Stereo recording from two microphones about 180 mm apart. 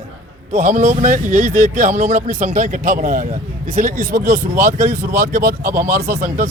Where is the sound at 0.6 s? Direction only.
40° right (ahead or behind).